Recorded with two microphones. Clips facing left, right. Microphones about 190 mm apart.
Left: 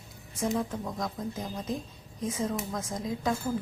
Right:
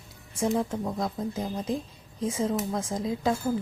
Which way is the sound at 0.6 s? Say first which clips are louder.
Right 4 dB; 30° right (ahead or behind).